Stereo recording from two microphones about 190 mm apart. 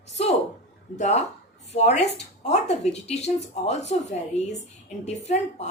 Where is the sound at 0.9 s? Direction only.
35° left (ahead or behind).